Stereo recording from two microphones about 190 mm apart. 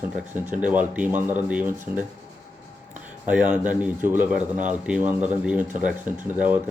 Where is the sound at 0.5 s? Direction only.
10° right (ahead or behind).